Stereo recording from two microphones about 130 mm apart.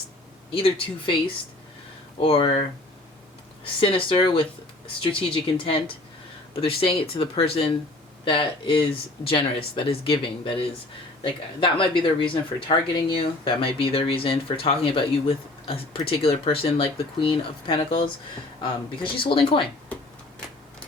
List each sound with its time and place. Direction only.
0.5 s speech: 45° left (ahead or behind)
2.2 s speech: 45° left (ahead or behind)
3.8 s speech: 45° left (ahead or behind)